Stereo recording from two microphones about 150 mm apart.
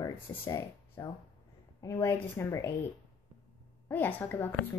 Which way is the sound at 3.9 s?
10° left (ahead or behind).